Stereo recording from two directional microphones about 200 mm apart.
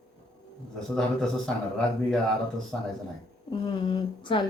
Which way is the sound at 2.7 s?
Centre (ahead or behind).